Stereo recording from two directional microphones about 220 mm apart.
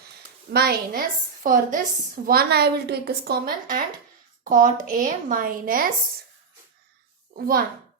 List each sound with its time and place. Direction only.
0.5 s a woman's voice: 45° right (ahead or behind)
7.3 s a woman's voice: 40° right (ahead or behind)